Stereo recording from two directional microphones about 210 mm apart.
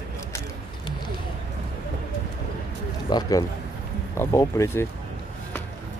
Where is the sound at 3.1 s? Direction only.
20° left (ahead or behind).